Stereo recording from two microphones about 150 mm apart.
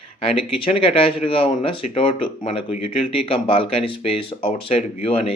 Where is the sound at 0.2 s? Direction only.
40° left (ahead or behind).